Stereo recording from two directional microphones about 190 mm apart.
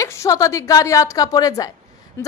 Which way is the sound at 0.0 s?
15° left (ahead or behind).